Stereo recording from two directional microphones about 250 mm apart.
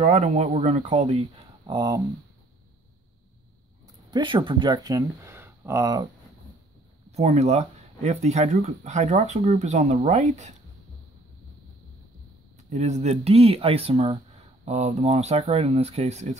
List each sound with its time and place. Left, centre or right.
0.0 s speech: right
1.7 s speech: centre
3.8 s speech: centre
7.1 s speech: right
12.6 s speech: right